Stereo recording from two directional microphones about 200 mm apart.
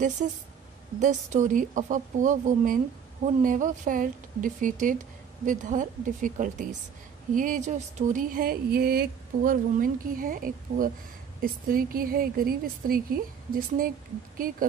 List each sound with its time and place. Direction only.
0.2 s speech: 40° right (ahead or behind)